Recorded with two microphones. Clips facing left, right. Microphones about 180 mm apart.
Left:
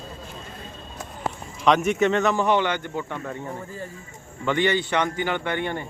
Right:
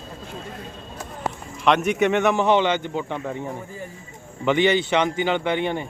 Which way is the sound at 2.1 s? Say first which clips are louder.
Right 2 dB; 20° right (ahead or behind).